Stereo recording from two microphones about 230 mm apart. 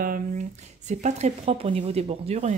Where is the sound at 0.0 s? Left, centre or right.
Right.